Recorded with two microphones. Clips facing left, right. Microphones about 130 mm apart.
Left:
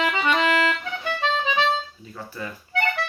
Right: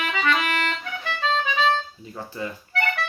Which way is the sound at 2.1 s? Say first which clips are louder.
Right 3 dB; 20° right (ahead or behind).